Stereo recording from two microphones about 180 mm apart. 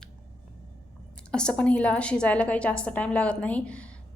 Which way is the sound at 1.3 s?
5° left (ahead or behind).